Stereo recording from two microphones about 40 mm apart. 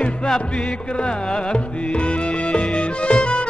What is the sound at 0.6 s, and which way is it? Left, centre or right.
Music, left.